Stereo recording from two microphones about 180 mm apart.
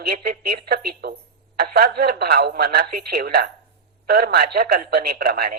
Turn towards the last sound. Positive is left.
turn(degrees=-55)  # may be behind; listen again after turning